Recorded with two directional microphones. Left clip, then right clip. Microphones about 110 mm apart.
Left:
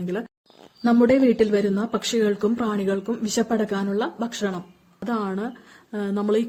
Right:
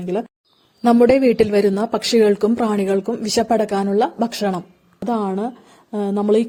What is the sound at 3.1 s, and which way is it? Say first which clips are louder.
Speech: right 6 dB; 65° right (ahead or behind).